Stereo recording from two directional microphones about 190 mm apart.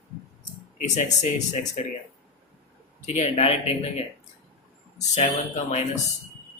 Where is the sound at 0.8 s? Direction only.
40° left (ahead or behind).